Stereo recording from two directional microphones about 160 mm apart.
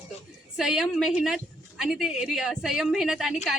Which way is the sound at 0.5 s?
5° right (ahead or behind).